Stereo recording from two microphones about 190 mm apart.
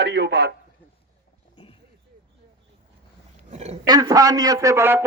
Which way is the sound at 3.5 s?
35° right (ahead or behind).